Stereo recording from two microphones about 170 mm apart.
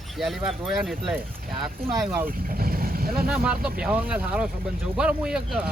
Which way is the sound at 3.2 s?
5° right (ahead or behind).